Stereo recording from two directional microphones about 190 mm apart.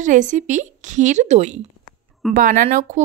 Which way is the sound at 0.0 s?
40° right (ahead or behind).